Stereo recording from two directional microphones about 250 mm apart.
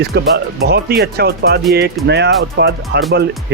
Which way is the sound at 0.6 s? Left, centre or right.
Right.